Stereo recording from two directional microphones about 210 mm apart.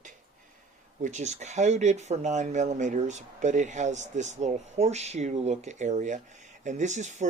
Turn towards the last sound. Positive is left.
turn(degrees=-35)  # may be behind; listen again after turning